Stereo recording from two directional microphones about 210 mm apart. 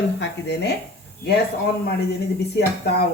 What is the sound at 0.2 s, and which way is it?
A woman's voice, 55° left (ahead or behind).